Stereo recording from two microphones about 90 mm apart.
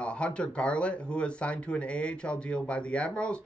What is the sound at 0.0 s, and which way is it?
Speech, 10° left (ahead or behind).